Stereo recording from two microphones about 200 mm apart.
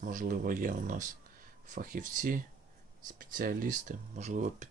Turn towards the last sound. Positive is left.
turn(degrees=-35)  # may be behind; listen again after turning